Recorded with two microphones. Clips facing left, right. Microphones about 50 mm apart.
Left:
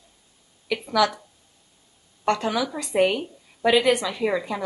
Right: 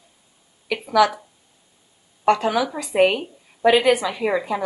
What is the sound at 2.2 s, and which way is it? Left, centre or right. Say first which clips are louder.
A woman's voice: right 5 dB; centre.